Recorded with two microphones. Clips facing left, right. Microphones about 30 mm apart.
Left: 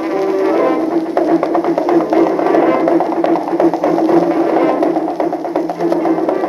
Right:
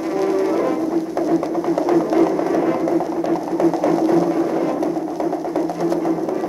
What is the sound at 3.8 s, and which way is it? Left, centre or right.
Music, left.